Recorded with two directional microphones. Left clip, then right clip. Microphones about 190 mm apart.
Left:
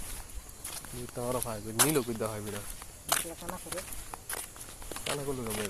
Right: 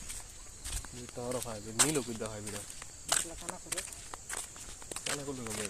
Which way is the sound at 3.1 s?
15° left (ahead or behind).